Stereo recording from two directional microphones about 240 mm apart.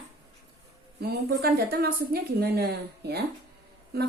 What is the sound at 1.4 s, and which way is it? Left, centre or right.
A woman's voice, right.